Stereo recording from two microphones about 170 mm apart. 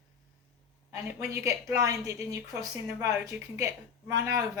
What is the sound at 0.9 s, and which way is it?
A woman's voice, 20° right (ahead or behind).